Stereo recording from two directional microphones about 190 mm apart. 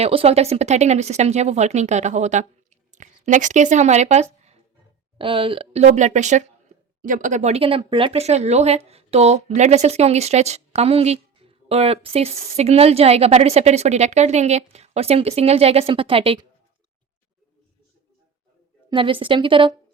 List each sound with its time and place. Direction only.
0.0 s speech: 30° right (ahead or behind)
18.9 s a woman's voice: 25° right (ahead or behind)